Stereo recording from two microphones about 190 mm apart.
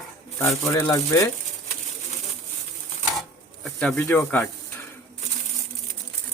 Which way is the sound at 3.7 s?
5° left (ahead or behind).